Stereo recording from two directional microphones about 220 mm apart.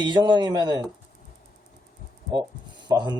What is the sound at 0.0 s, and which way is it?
Speech, 20° right (ahead or behind).